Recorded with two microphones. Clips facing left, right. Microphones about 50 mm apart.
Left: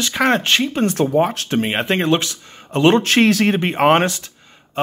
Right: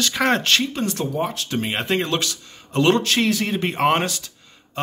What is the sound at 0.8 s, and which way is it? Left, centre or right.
Speech, left.